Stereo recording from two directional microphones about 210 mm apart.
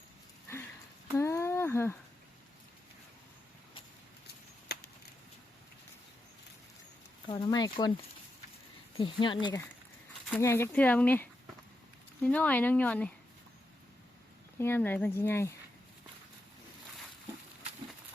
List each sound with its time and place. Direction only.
1.1 s a sound: 15° left (ahead or behind)
4.7 s chop: 50° left (ahead or behind)
7.3 s speech: 25° left (ahead or behind)
9.0 s speech: 25° left (ahead or behind); by 13.1 s 5° left (ahead or behind)
14.6 s speech: 10° left (ahead or behind)